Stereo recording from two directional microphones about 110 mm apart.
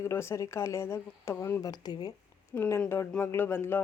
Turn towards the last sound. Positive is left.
turn(degrees=20)  # may be behind; listen again after turning